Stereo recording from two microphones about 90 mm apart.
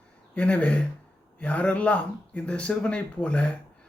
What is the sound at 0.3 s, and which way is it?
Speech, 15° left (ahead or behind).